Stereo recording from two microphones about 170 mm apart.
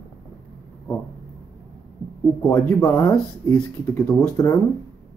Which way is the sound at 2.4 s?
10° left (ahead or behind).